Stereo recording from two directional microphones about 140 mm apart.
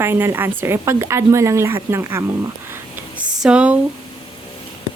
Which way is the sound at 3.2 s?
5° right (ahead or behind).